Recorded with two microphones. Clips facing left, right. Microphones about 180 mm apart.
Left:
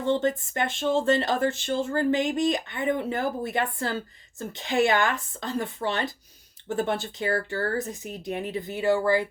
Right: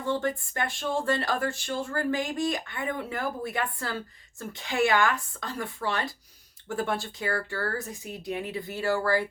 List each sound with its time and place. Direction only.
0.0 s speech: 20° left (ahead or behind)